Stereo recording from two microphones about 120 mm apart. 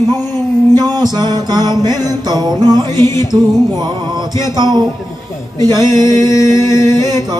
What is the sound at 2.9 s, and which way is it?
Singing, 25° left (ahead or behind).